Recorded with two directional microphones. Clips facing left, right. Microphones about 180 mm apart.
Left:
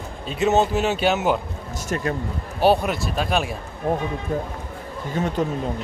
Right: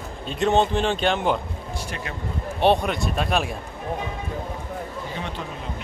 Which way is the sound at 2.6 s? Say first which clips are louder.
Left 1 dB; 5° left (ahead or behind).